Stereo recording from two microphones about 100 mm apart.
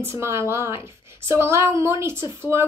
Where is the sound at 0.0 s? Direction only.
25° right (ahead or behind).